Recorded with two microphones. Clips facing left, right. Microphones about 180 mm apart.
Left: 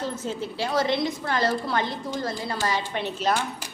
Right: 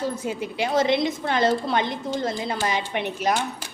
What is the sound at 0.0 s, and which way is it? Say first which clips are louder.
A woman's voice: right 2 dB; 10° right (ahead or behind).